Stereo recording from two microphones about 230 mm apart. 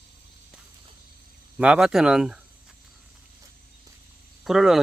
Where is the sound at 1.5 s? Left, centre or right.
Centre.